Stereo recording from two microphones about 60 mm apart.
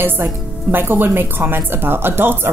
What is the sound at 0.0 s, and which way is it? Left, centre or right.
Speech, right.